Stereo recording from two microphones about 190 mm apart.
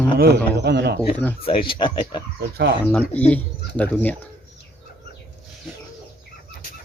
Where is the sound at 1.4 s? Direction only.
30° left (ahead or behind).